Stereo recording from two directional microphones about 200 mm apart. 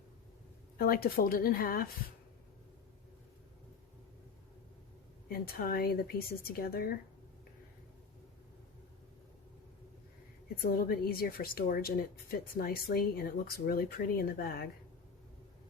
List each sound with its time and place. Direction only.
0.8 s speech: 50° left (ahead or behind)
5.3 s speech: 50° left (ahead or behind)
10.5 s speech: 45° left (ahead or behind)